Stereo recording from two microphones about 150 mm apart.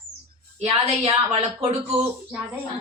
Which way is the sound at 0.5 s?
45° right (ahead or behind).